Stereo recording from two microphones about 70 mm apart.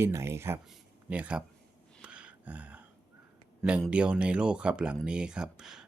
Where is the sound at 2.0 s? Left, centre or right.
Centre.